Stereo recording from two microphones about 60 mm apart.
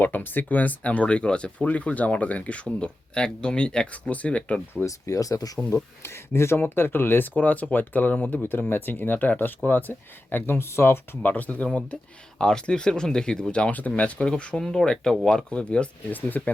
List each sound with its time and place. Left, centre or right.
0.0 s speech: left
4.9 s speech: left
6.3 s speech: left
11.2 s speech: left